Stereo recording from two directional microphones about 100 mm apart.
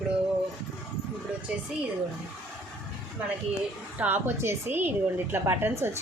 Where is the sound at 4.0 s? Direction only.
20° right (ahead or behind).